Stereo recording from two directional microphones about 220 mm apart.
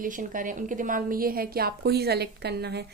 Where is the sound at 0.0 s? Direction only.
40° right (ahead or behind).